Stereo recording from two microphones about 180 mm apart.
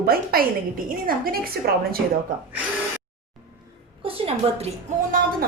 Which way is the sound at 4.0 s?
30° right (ahead or behind).